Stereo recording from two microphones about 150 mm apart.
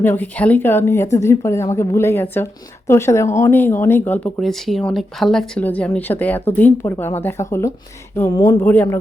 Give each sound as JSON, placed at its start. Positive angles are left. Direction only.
{"t": 0.0, "sound": "speech", "side_deg": 15}
{"t": 4.4, "sound": "speech", "side_deg": 0}
{"t": 8.6, "sound": "speech", "side_deg": 10}